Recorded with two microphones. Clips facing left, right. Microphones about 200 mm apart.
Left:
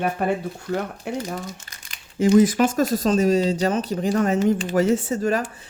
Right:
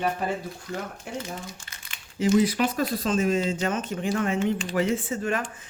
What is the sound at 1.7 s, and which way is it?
Speech, 45° left (ahead or behind).